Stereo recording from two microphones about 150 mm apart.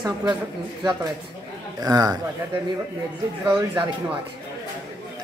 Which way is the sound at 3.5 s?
10° right (ahead or behind).